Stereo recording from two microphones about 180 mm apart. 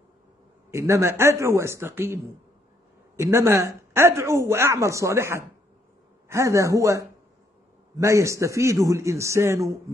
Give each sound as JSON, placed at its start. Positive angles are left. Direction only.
{"t": 0.7, "sound": "speech", "side_deg": -15}
{"t": 3.2, "sound": "speech", "side_deg": -15}